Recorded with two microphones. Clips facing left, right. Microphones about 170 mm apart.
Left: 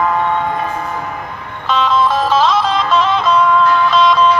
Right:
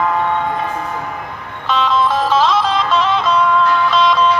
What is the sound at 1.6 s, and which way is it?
Music, 45° left (ahead or behind).